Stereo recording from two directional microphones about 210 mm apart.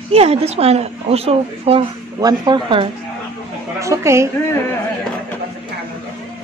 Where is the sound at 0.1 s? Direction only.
30° right (ahead or behind); by 4.3 s 15° right (ahead or behind).